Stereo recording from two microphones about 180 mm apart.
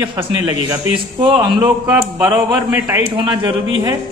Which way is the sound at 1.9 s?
10° right (ahead or behind).